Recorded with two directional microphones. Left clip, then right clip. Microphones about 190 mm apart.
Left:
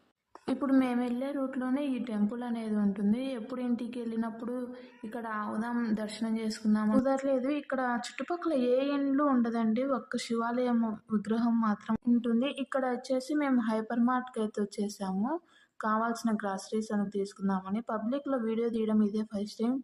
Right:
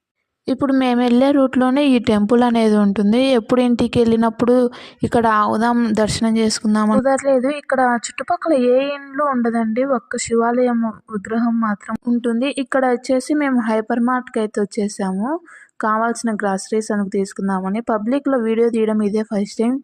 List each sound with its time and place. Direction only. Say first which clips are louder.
0.4 s speech: right 12 dB; 40° right (ahead or behind); by 7.0 s 60° right (ahead or behind)
7.0 s speech: right 16 dB; 40° right (ahead or behind)